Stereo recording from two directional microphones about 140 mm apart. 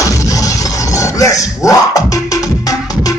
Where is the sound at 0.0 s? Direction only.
25° left (ahead or behind).